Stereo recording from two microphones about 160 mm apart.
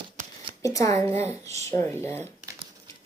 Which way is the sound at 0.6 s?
20° left (ahead or behind).